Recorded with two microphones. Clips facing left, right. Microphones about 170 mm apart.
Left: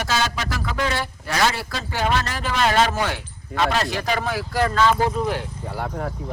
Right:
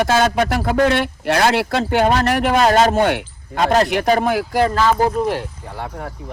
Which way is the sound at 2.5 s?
45° right (ahead or behind).